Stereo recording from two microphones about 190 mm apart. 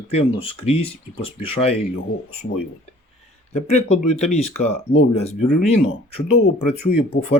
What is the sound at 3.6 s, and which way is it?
Speech, 35° left (ahead or behind).